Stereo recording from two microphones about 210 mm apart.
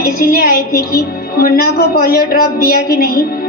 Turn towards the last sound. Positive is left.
turn(degrees=45)  # may be behind; listen again after turning